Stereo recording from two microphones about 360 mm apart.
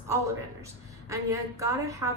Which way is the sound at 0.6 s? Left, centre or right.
Centre.